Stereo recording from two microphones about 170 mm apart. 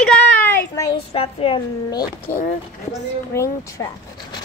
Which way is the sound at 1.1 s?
35° left (ahead or behind).